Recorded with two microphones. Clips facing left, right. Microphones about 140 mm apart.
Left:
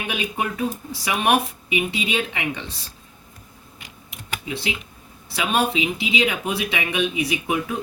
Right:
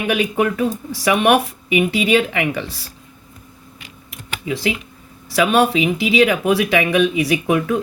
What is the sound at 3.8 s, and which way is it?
Typing, 90° right.